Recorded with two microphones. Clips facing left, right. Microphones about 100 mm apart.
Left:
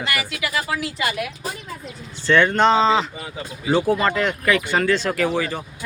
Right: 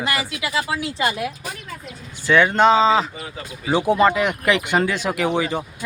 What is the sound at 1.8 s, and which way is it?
Speech, 5° right (ahead or behind).